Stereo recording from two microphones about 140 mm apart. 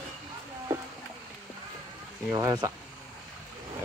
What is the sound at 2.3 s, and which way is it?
Speech, 25° right (ahead or behind).